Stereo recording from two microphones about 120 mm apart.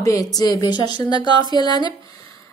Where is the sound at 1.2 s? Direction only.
40° right (ahead or behind).